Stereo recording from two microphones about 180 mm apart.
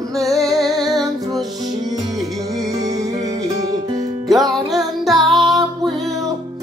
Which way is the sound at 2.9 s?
20° right (ahead or behind).